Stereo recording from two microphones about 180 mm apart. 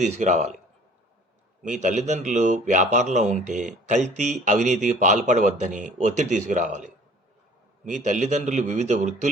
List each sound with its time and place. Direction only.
0.0 s a man's voice: 40° right (ahead or behind)
1.6 s a man's voice: 45° right (ahead or behind)